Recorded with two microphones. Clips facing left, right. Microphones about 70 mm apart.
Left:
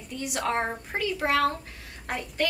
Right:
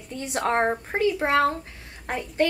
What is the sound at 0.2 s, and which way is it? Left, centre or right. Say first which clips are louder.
A woman's voice: right 5 dB; right.